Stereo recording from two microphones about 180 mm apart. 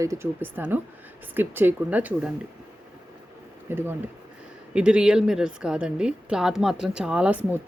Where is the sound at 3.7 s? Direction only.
10° right (ahead or behind).